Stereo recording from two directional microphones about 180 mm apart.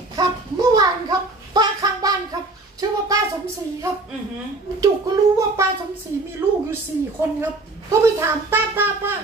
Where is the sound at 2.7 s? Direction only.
20° right (ahead or behind).